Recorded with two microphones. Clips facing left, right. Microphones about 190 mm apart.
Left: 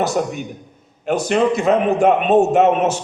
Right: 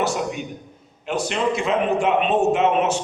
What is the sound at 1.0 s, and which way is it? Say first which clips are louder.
A man's voice: left 6 dB; 45° left (ahead or behind).